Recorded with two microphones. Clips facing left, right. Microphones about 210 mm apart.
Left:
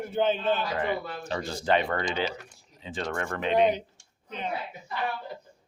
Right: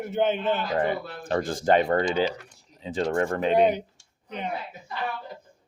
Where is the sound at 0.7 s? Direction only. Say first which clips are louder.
Right 3 dB; 50° right (ahead or behind).